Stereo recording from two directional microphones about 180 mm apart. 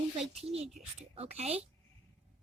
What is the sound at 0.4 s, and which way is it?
Speech, 35° right (ahead or behind).